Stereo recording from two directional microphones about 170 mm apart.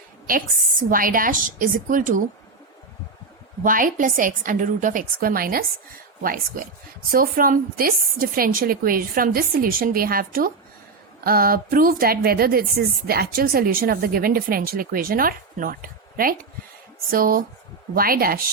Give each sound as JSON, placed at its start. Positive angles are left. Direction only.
{"t": 0.3, "sound": "a woman's voice", "side_deg": -55}
{"t": 3.6, "sound": "a woman's voice", "side_deg": -55}